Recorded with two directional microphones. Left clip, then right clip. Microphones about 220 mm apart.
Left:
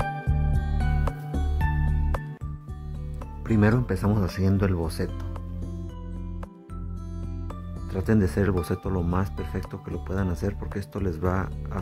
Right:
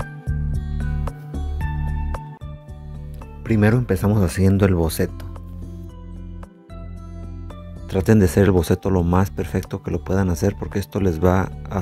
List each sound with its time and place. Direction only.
0.0 s music: centre (ahead or behind)
3.4 s speech: 15° right (ahead or behind)
7.9 s speech: 20° right (ahead or behind)